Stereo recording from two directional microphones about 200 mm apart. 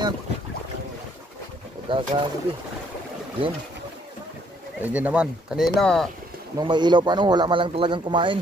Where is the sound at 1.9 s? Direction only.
25° right (ahead or behind).